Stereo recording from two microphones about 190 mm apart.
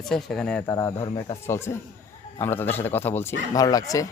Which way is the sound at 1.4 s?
15° left (ahead or behind).